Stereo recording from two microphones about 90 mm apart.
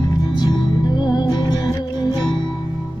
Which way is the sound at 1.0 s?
50° left (ahead or behind).